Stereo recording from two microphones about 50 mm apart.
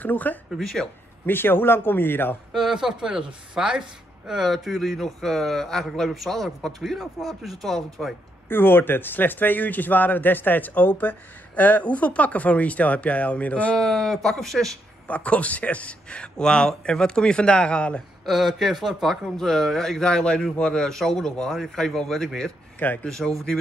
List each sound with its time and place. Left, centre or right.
0.0 s a man's voice: left
0.6 s a man's voice: centre
1.2 s speech: left
2.5 s a man's voice: centre
7.0 s a man's voice: centre
8.5 s a man's voice: left
13.7 s a man's voice: centre
15.0 s speech: left
18.2 s a man's voice: centre
19.3 s a man's voice: centre